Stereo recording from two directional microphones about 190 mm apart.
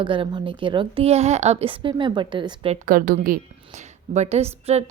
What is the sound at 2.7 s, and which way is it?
A woman's voice, 45° right (ahead or behind).